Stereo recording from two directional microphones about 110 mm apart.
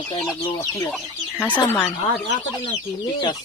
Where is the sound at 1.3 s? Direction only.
15° left (ahead or behind).